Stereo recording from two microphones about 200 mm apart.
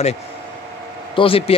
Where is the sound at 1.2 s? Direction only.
30° left (ahead or behind).